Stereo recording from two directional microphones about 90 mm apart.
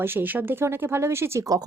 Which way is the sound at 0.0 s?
25° right (ahead or behind).